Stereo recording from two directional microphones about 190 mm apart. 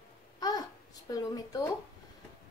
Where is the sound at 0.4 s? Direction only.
20° left (ahead or behind).